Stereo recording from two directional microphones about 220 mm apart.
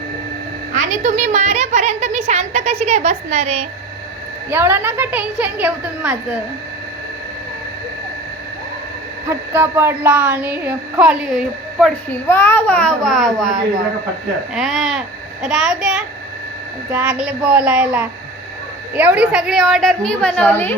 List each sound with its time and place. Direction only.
0.7 s a woman's voice: 35° right (ahead or behind)
4.4 s speech: 10° right (ahead or behind)
9.3 s speech: 10° right (ahead or behind)
12.3 s a woman's voice: 10° left (ahead or behind)
14.5 s a woman's voice: centre (ahead or behind)